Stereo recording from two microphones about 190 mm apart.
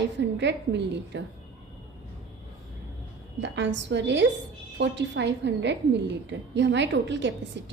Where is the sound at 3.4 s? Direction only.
70° right (ahead or behind).